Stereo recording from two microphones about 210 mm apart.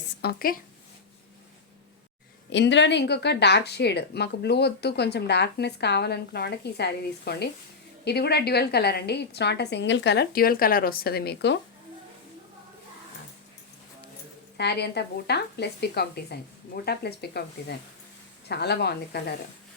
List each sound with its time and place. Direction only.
0.2 s speech: 45° left (ahead or behind)
2.5 s speech: 60° left (ahead or behind)
14.6 s speech: 50° left (ahead or behind)